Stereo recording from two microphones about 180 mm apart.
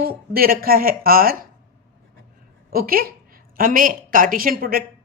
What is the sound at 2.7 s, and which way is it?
A woman's voice, 55° right (ahead or behind).